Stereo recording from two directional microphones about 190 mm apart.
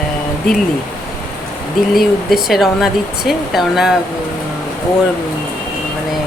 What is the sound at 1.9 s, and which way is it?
Speech, centre (ahead or behind).